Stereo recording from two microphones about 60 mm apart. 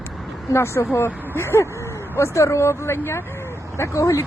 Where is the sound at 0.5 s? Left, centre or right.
Left.